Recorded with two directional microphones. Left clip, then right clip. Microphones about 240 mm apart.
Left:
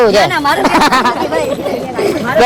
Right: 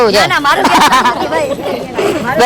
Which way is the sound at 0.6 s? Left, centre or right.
Right.